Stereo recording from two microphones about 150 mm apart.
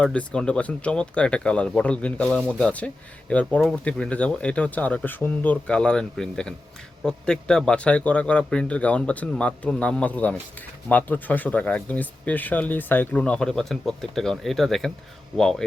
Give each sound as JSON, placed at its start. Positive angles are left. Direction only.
{"t": 0.0, "sound": "speech", "side_deg": 5}